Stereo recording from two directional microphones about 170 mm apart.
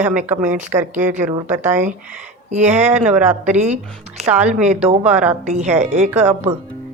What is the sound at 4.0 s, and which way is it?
Speech, 40° right (ahead or behind).